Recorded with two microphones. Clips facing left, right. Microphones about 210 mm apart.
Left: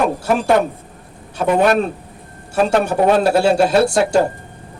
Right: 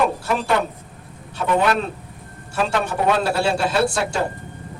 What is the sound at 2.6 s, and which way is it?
Speech, 40° left (ahead or behind).